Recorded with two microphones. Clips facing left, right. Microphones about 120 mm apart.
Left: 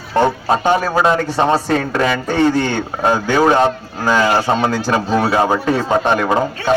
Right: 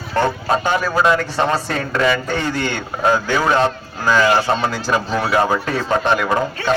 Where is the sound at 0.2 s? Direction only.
20° left (ahead or behind).